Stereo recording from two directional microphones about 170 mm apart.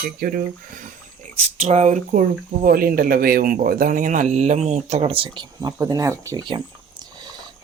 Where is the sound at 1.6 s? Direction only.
40° right (ahead or behind).